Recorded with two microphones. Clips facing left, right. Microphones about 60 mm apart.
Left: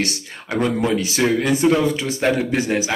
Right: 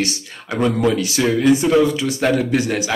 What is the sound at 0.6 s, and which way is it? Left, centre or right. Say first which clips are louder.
Speech: right 3 dB; centre.